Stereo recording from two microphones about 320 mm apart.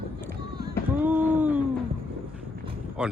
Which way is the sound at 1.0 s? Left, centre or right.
Centre.